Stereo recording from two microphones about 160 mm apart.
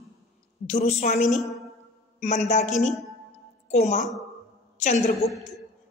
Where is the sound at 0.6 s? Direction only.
50° left (ahead or behind).